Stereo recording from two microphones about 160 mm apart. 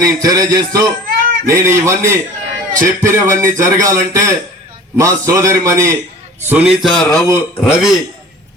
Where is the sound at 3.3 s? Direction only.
20° right (ahead or behind).